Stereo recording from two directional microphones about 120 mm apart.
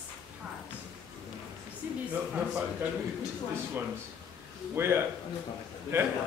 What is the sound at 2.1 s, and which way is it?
Speech, 10° right (ahead or behind).